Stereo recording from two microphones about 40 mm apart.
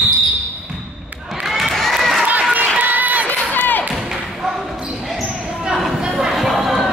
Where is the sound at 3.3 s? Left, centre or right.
Left.